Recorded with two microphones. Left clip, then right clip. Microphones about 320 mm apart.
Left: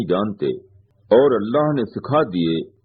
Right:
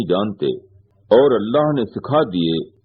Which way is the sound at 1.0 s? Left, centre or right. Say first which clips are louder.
Right 1 dB; right.